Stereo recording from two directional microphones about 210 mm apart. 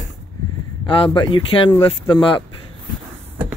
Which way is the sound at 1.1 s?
25° left (ahead or behind).